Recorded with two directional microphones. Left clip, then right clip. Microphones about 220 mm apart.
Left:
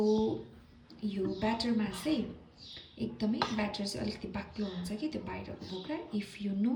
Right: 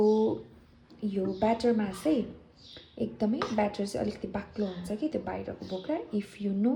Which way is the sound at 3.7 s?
25° left (ahead or behind).